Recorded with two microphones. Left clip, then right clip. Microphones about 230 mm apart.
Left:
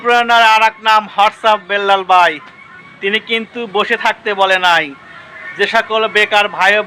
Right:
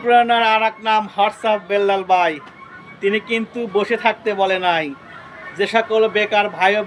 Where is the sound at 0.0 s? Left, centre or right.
Centre.